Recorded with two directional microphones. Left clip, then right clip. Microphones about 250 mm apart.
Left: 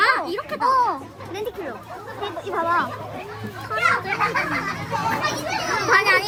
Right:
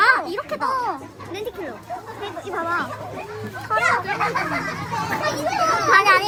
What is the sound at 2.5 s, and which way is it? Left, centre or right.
Speech, left.